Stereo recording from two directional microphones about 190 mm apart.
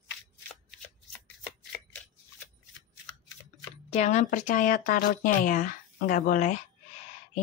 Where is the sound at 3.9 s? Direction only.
35° left (ahead or behind).